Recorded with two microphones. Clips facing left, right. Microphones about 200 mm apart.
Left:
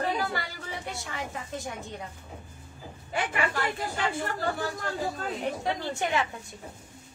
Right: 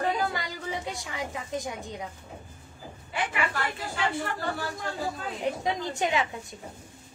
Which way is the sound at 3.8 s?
40° left (ahead or behind).